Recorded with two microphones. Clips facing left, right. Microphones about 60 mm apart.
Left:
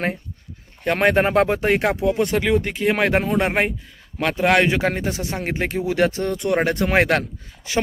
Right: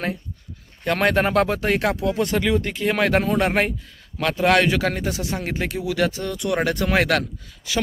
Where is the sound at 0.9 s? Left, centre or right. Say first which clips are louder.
Left 2 dB; left.